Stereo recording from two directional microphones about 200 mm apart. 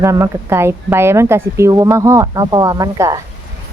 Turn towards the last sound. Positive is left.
turn(degrees=-15)  # may be behind; listen again after turning